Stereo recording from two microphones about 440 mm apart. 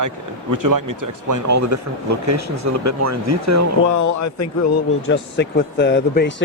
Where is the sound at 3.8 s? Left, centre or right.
Left.